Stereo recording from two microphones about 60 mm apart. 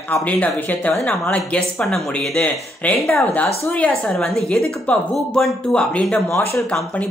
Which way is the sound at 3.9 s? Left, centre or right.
Centre.